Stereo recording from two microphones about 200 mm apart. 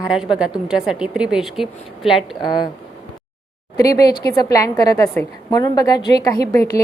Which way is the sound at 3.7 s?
15° left (ahead or behind).